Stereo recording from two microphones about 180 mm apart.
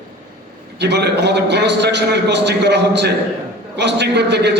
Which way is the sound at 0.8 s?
70° right (ahead or behind).